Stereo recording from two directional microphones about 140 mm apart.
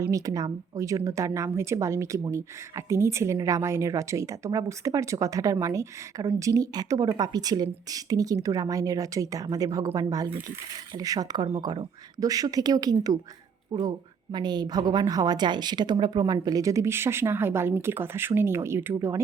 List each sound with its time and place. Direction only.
0.1 s a woman's voice: 25° right (ahead or behind)